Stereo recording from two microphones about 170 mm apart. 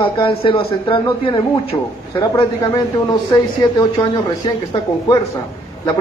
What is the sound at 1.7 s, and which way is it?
A man's voice, 20° left (ahead or behind).